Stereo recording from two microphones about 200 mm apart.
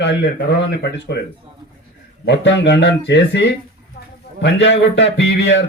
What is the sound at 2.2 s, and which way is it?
Speech, 60° left (ahead or behind).